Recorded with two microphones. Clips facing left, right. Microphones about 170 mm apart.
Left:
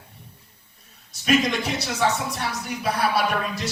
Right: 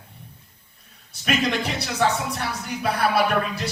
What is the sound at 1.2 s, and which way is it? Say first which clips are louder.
Speech: left 2 dB; 60° right (ahead or behind).